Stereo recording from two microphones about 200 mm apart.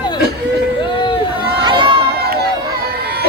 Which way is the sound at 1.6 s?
25° right (ahead or behind).